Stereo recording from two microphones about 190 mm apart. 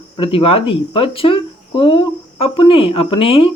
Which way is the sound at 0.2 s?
30° left (ahead or behind).